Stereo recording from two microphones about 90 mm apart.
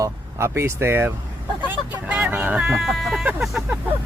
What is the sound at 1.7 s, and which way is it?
Speech, 15° right (ahead or behind).